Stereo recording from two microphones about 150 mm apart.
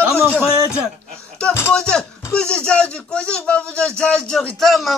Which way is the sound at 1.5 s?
15° left (ahead or behind).